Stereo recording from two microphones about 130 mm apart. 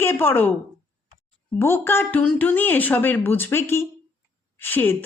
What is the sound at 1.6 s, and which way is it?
Speech, 20° left (ahead or behind).